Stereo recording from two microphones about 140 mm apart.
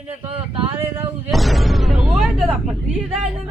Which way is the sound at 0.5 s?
40° right (ahead or behind).